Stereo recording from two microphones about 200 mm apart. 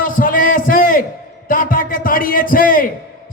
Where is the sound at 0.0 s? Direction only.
45° left (ahead or behind).